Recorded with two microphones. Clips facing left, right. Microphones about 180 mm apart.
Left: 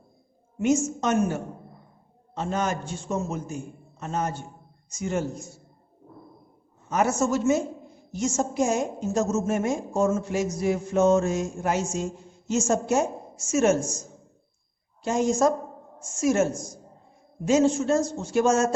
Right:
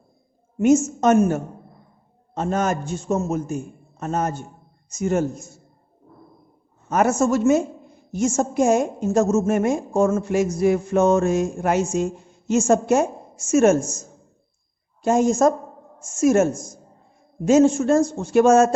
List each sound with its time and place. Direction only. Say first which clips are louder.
0.6 s a man's voice: right 7 dB; 45° right (ahead or behind)
6.9 s a man's voice: right 5 dB; 50° right (ahead or behind)
15.0 s a man's voice: right 5 dB; 50° right (ahead or behind)